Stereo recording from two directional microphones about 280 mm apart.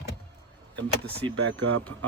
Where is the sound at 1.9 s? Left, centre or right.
Right.